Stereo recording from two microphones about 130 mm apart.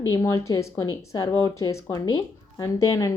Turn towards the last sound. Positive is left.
turn(degrees=25)  # may be behind; listen again after turning